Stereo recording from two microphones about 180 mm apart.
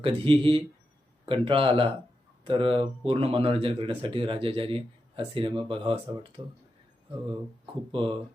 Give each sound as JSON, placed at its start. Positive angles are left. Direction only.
{"t": 0.0, "sound": "a man's voice", "side_deg": -30}
{"t": 7.9, "sound": "a man's voice", "side_deg": -30}